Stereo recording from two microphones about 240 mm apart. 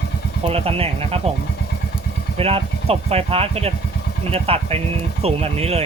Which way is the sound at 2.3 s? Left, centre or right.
Right.